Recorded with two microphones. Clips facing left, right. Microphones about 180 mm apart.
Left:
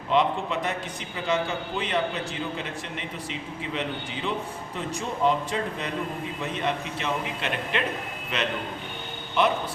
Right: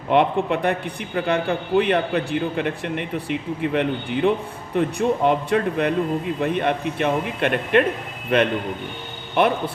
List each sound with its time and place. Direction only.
0.1 s a man's voice: 60° right (ahead or behind)